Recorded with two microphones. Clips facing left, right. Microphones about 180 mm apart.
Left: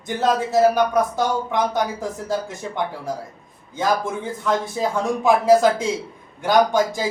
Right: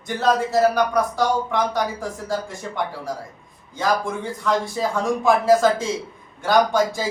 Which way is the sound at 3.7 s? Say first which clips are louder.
Left 1 dB; 20° left (ahead or behind).